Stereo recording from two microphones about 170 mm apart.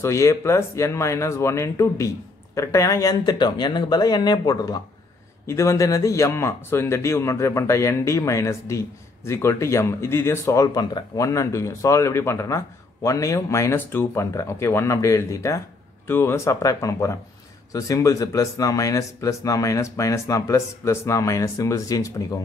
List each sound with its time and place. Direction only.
0.0 s speech: 15° left (ahead or behind)